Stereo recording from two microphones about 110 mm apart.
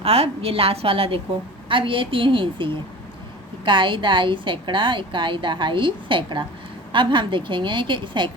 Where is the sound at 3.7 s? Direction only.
45° right (ahead or behind).